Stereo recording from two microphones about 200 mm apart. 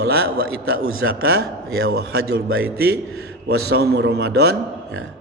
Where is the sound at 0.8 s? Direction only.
90° right.